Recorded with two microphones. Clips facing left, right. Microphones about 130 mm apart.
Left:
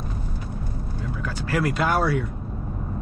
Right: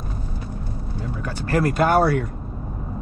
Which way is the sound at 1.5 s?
45° right (ahead or behind).